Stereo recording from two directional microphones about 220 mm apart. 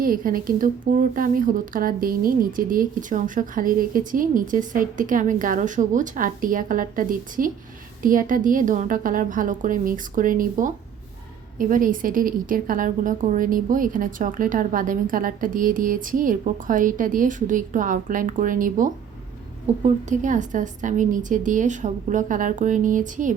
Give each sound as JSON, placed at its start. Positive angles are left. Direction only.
{"t": 0.0, "sound": "speech", "side_deg": -40}